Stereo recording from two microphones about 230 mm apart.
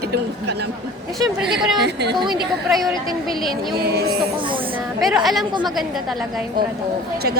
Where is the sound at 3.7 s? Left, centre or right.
Right.